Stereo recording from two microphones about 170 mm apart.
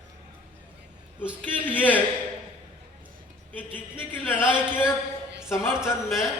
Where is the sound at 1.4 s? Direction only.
10° left (ahead or behind).